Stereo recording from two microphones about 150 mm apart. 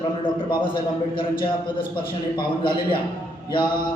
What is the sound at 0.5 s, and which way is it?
A man's voice, 30° left (ahead or behind).